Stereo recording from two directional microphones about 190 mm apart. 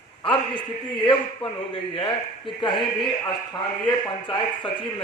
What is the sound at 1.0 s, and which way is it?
A man's voice, 25° left (ahead or behind).